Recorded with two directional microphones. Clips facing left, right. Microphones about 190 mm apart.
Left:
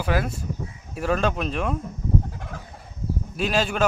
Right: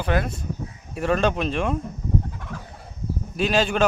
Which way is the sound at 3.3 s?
Centre (ahead or behind).